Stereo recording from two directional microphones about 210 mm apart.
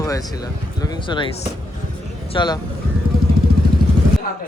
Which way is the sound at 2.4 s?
20° left (ahead or behind).